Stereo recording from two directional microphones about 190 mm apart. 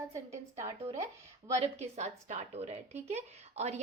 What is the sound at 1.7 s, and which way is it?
A woman's voice, 35° right (ahead or behind).